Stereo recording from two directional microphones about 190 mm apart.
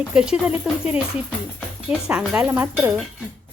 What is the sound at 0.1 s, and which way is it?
A woman's voice, 5° right (ahead or behind).